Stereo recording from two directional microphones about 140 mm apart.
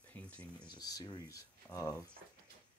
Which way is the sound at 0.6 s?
30° left (ahead or behind).